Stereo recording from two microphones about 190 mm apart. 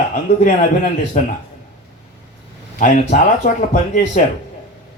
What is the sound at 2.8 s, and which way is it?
A man's voice, 40° left (ahead or behind).